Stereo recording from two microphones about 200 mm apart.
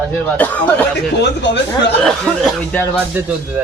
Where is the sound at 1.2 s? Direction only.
60° left (ahead or behind).